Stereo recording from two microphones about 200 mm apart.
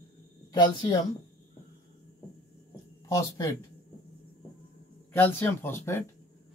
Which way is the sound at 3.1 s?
15° left (ahead or behind).